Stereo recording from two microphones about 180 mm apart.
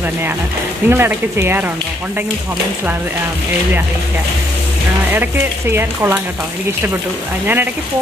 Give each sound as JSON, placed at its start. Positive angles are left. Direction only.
{"t": 0.8, "sound": "speech", "side_deg": -15}
{"t": 5.1, "sound": "speech", "side_deg": -10}